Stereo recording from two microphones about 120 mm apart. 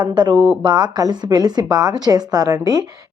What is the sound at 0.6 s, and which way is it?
A woman's voice, 35° right (ahead or behind).